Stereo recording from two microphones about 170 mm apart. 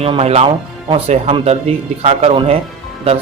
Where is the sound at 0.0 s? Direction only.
35° right (ahead or behind).